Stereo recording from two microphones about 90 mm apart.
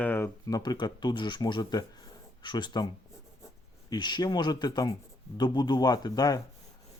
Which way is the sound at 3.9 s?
55° left (ahead or behind).